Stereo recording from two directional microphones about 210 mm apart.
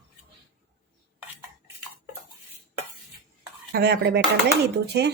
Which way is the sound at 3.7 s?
50° right (ahead or behind).